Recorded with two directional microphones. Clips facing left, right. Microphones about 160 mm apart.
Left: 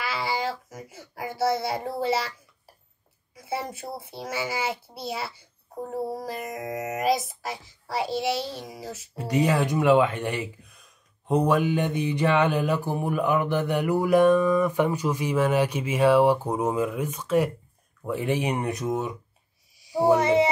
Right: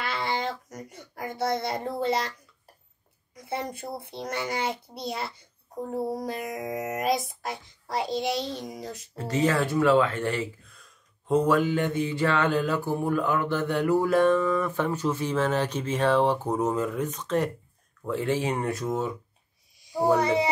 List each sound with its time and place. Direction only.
0.0 s babbling: 5° left (ahead or behind)
3.3 s a child's voice: 5° left (ahead or behind)
9.1 s speech: 15° left (ahead or behind)
19.8 s music: centre (ahead or behind)